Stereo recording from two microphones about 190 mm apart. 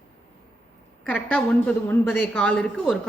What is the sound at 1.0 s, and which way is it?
A woman's voice, 10° left (ahead or behind).